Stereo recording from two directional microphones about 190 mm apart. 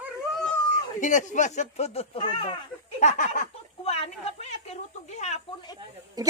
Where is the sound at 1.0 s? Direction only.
40° left (ahead or behind).